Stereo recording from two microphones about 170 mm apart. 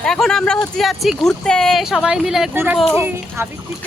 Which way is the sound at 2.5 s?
5° right (ahead or behind).